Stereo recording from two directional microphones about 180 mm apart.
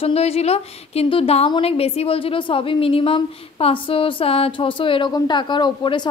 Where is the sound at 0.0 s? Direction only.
35° left (ahead or behind).